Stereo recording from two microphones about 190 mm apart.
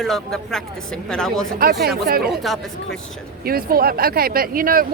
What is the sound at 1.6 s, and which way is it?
Speech, 55° right (ahead or behind).